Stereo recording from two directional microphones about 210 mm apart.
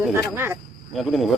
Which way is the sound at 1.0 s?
Centre (ahead or behind).